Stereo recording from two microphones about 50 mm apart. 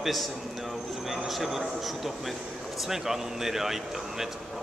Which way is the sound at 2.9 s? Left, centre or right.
Centre.